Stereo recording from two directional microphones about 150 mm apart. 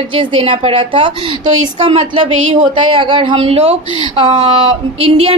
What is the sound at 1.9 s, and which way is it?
Speech, 45° right (ahead or behind).